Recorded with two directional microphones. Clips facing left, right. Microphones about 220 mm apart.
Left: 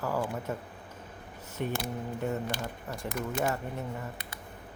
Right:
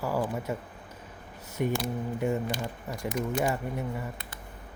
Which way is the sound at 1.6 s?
10° right (ahead or behind).